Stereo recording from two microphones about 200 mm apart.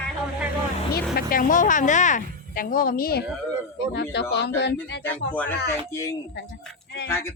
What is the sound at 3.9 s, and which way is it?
Speech, 60° left (ahead or behind).